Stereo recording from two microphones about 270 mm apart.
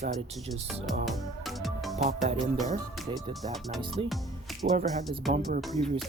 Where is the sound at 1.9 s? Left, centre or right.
Right.